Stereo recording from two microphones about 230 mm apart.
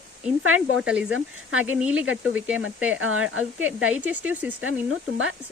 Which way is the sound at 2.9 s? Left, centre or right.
Right.